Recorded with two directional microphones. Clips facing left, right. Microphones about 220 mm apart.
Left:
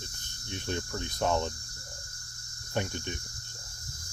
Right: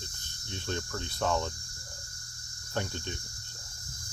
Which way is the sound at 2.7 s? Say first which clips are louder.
Left 2 dB; 15° left (ahead or behind).